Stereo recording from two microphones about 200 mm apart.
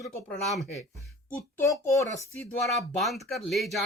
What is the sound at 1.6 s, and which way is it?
Speech, 15° left (ahead or behind).